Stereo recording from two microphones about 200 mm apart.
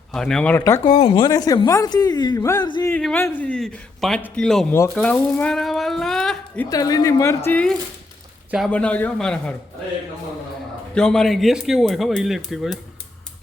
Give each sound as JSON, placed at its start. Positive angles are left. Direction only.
{"t": 0.1, "sound": "speech", "side_deg": 5}
{"t": 0.6, "sound": "speech", "side_deg": 20}
{"t": 2.9, "sound": "a man's voice", "side_deg": 5}
{"t": 6.7, "sound": "a man's voice", "side_deg": 20}
{"t": 10.9, "sound": "speech", "side_deg": 5}